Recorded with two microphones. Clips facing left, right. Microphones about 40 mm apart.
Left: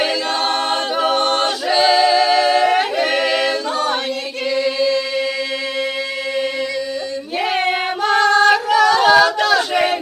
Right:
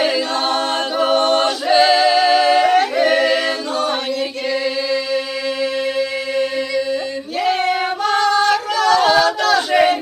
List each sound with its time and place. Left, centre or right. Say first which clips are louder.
0.3 s choir: even; centre
1.8 s singing: even; centre
3.0 s a capella: right 2 dB; centre
7.3 s female singing: right 1 dB; left
8.1 s singing: left 3 dB; left
8.6 s a sound: left 2 dB; centre
9.7 s a sound: right 3 dB; centre